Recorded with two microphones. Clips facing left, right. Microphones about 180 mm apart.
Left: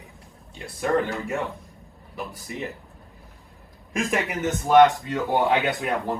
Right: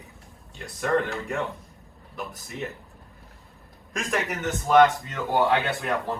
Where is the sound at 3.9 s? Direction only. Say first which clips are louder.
Left 3 dB; 10° left (ahead or behind).